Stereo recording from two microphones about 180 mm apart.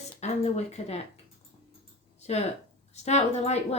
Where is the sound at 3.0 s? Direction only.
40° left (ahead or behind).